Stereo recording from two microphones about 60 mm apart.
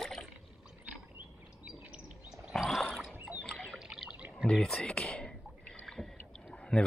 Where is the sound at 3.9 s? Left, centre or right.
Centre.